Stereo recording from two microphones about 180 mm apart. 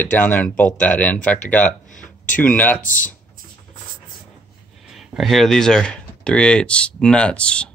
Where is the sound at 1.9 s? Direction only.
45° left (ahead or behind).